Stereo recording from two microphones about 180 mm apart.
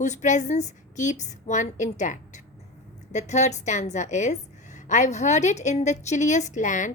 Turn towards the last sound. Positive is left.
turn(degrees=45)  # may be behind; listen again after turning